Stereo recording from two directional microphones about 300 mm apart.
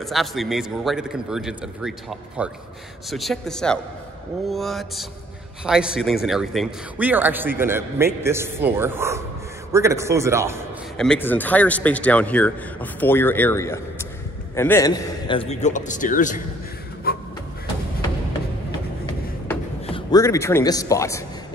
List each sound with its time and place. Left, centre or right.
0.0 s a man's voice: centre
11.0 s a man's voice: centre; by 16.3 s left
17.1 s a sound: left
19.9 s a man's voice: centre